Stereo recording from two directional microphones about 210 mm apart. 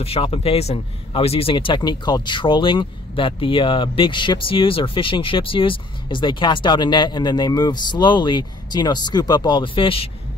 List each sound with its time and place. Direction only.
0.0 s speech: 30° left (ahead or behind)